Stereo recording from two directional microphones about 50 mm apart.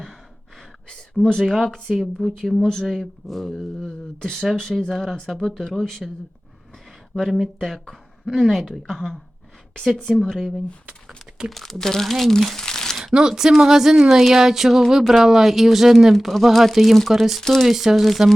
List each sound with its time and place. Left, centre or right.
0.9 s a sound: centre
1.9 s speech: centre
2.6 s speech: centre
7.2 s speech: centre
8.3 s speech: centre
8.5 s speech: centre
13.1 s speech: centre
17.7 s speech: centre